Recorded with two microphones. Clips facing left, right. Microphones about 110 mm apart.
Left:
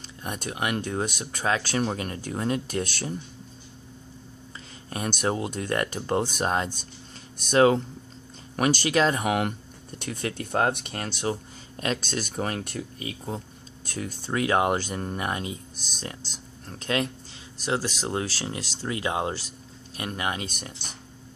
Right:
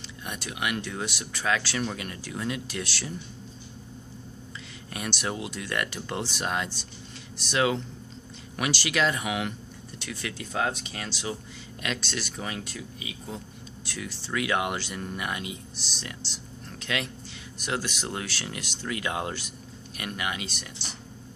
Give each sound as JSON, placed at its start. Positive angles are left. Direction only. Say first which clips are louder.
{"t": 0.2, "sound": "speech", "louder": "left 3 dB", "side_deg": 40}
{"t": 4.8, "sound": "speech", "louder": "left 5 dB", "side_deg": 35}